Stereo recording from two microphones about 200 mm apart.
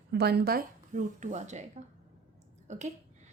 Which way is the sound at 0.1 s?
55° right (ahead or behind).